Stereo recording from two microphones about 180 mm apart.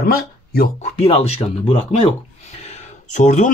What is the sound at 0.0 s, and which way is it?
Speech, 55° left (ahead or behind).